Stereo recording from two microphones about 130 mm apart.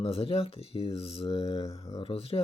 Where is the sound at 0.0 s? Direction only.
45° left (ahead or behind).